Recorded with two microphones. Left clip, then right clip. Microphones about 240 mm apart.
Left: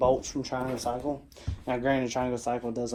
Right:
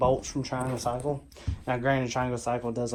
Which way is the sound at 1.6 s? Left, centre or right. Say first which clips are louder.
Right 1 dB; left.